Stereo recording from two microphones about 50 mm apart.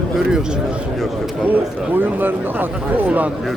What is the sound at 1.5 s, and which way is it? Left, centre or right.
Speech, right.